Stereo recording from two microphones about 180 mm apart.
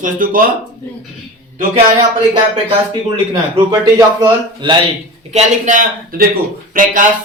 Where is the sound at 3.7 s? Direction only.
20° right (ahead or behind).